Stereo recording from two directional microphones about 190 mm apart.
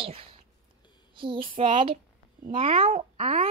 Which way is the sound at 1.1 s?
25° right (ahead or behind).